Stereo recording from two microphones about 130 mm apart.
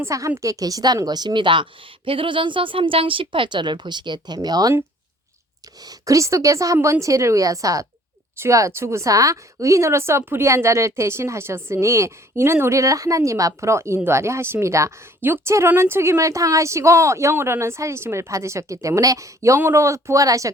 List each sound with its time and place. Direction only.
0.0 s a woman's voice: 20° right (ahead or behind)
5.8 s a woman's voice: 25° right (ahead or behind)